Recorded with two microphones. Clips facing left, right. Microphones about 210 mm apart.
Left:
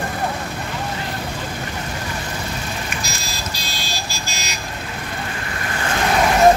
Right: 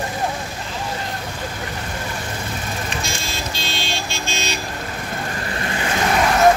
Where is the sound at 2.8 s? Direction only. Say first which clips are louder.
Right 2 dB; 25° right (ahead or behind).